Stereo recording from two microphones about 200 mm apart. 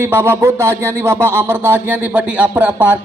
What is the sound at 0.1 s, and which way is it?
Speech, 10° right (ahead or behind).